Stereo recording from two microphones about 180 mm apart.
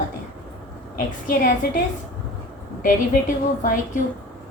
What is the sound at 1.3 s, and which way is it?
Speech, 50° left (ahead or behind).